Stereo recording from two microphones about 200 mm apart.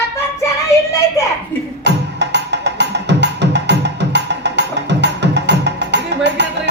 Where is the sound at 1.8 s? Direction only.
60° right (ahead or behind).